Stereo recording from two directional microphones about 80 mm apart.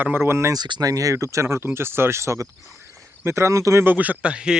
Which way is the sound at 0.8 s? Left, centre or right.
Right.